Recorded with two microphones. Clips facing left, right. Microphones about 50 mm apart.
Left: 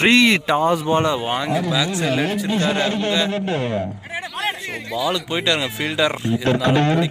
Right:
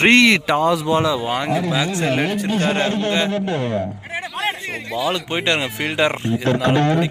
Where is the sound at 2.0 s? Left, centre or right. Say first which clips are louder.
Right 1 dB; right.